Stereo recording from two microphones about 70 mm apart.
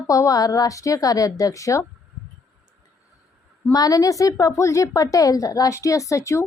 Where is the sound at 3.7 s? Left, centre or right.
Left.